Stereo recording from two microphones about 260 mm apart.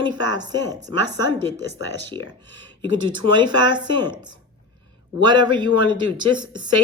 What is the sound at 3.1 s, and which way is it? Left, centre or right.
Speech, centre.